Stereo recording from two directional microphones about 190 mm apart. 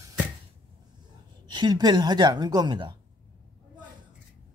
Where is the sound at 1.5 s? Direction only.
20° right (ahead or behind).